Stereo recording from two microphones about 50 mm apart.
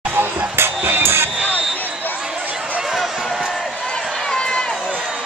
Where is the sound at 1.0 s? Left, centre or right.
Right.